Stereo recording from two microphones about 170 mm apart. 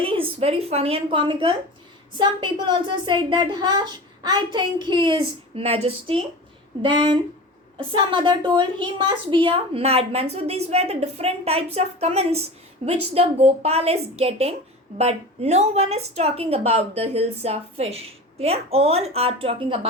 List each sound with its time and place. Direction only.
0.0 s a woman's voice: 35° right (ahead or behind)